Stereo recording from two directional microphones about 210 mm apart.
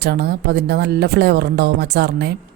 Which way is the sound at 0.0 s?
50° right (ahead or behind).